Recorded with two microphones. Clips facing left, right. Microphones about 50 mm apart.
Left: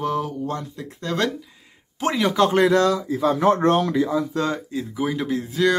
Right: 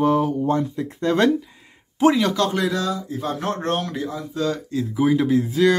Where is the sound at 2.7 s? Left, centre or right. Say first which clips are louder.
Left 6 dB; left.